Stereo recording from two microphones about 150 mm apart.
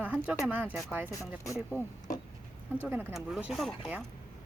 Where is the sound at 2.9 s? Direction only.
15° right (ahead or behind).